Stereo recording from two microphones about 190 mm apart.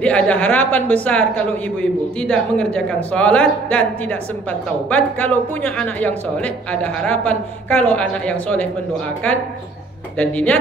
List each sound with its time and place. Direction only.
0.0 s a man's voice: 5° left (ahead or behind)
10.1 s a man's voice: 5° left (ahead or behind)